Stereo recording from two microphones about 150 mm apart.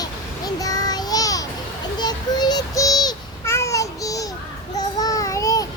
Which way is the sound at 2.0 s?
30° left (ahead or behind).